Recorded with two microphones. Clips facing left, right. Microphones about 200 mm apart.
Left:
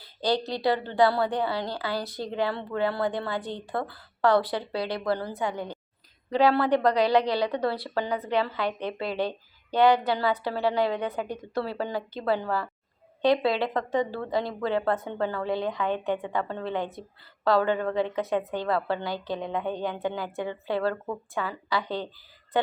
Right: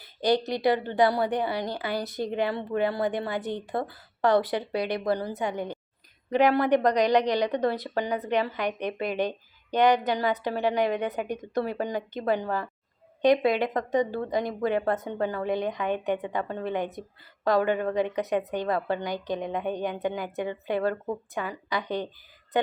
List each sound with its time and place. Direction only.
0.2 s a woman's voice: 20° right (ahead or behind)